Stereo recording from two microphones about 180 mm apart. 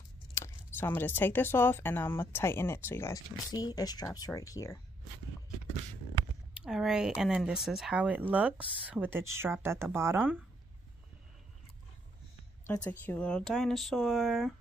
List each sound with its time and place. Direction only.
0.4 s a sound: 15° left (ahead or behind)
0.7 s speech: 10° left (ahead or behind)
6.5 s speech: 5° right (ahead or behind)
12.6 s speech: 10° left (ahead or behind)